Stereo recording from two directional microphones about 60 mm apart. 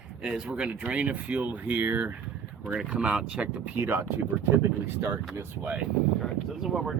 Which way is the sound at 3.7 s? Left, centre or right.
Right.